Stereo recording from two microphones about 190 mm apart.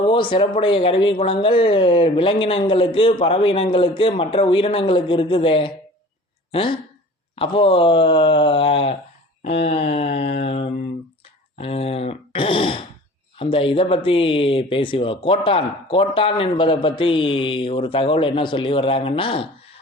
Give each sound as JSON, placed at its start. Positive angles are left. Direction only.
{"t": 0.1, "sound": "speech", "side_deg": 25}
{"t": 10.2, "sound": "mantra", "side_deg": 30}
{"t": 11.5, "sound": "speech", "side_deg": 30}